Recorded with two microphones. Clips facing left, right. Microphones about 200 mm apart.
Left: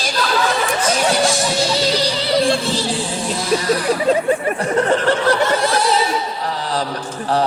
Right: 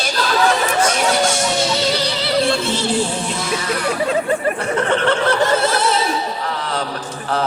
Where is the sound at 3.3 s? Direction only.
35° left (ahead or behind).